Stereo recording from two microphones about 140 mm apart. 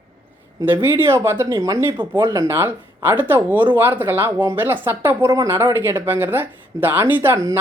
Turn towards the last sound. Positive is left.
turn(degrees=-20)  # may be behind; listen again after turning